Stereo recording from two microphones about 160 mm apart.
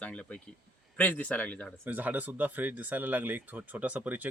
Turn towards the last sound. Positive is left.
turn(degrees=-10)  # may be behind; listen again after turning